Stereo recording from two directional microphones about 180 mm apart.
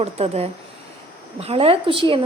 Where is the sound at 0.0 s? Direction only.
35° right (ahead or behind).